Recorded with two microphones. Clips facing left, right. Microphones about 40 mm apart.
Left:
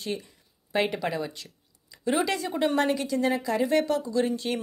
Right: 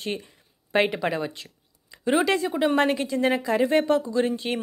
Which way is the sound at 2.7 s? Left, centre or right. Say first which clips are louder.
Right 3 dB; right.